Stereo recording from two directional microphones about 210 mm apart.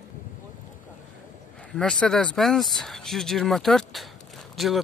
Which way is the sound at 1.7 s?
5° left (ahead or behind).